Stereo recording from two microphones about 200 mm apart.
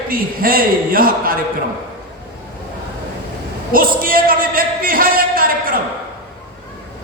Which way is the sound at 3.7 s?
45° right (ahead or behind).